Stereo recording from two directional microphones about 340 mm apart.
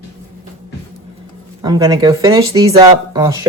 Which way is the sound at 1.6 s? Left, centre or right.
Centre.